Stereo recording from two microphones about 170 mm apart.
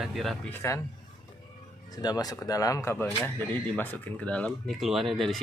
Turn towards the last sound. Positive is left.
turn(degrees=0)  # may be behind; listen again after turning